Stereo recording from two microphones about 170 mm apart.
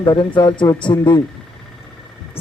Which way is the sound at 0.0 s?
25° left (ahead or behind).